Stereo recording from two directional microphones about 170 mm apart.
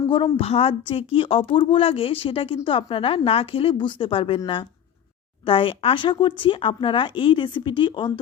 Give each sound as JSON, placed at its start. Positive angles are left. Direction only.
{"t": 0.3, "sound": "speech", "side_deg": 35}